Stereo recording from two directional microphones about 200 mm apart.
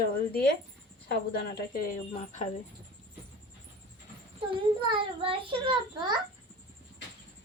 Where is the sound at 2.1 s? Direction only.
35° left (ahead or behind).